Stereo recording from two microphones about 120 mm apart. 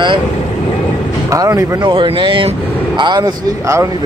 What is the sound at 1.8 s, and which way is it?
Speech, 40° right (ahead or behind).